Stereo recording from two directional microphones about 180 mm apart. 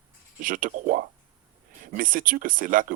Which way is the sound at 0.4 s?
50° right (ahead or behind).